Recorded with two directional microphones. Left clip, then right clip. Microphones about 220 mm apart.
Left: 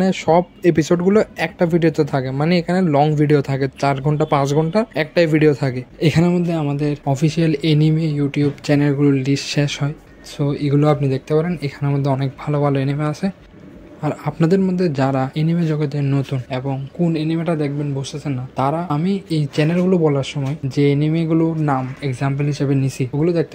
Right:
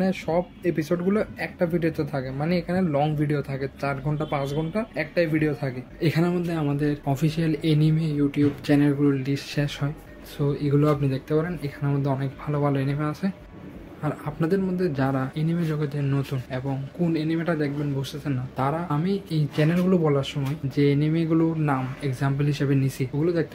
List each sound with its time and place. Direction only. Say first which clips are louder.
0.0 s speech: left 9 dB; 35° left (ahead or behind)